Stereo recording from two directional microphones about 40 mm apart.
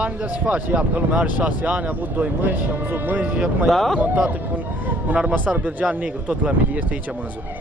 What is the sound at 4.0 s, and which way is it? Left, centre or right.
Speech, right.